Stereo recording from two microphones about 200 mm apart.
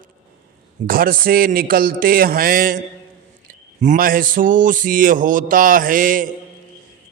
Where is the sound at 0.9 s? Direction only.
45° right (ahead or behind).